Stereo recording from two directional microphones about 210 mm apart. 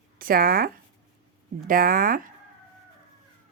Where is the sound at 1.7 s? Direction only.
40° right (ahead or behind).